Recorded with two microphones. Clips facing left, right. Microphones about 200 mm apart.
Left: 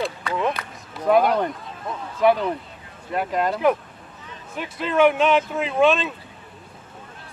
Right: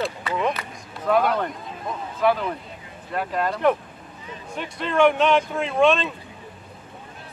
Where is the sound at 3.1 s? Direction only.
20° left (ahead or behind).